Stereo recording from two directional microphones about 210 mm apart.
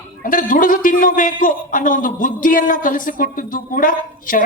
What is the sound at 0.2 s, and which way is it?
A man's voice, 40° left (ahead or behind).